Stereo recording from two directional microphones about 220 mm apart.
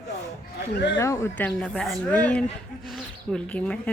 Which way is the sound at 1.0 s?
10° left (ahead or behind).